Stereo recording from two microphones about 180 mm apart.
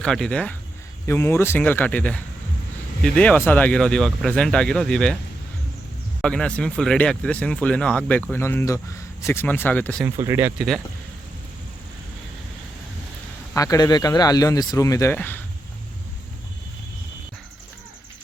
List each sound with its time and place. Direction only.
0.0 s speech: 5° left (ahead or behind)
6.2 s speech: 5° left (ahead or behind)
10.2 s speech: 15° right (ahead or behind)
13.5 s speech: 20° left (ahead or behind)